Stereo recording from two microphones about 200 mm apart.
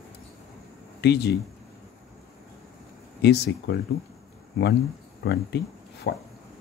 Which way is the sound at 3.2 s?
55° left (ahead or behind).